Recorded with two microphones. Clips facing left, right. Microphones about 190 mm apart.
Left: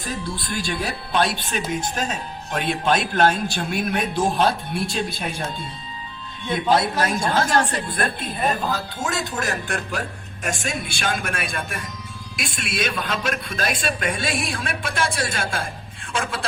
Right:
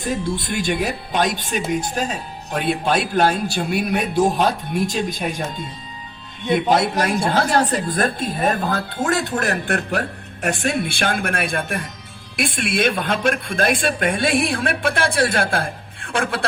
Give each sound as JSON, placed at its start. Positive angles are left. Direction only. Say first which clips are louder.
{"t": 0.1, "sound": "speech", "louder": "right 6 dB", "side_deg": -25}
{"t": 4.7, "sound": "speech", "louder": "right 4 dB", "side_deg": -40}
{"t": 6.4, "sound": "speech", "louder": "right 3 dB", "side_deg": -20}
{"t": 7.3, "sound": "a woman's voice", "louder": "right 2 dB", "side_deg": -35}